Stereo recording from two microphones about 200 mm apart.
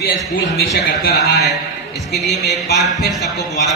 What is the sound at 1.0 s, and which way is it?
Speech, 55° left (ahead or behind).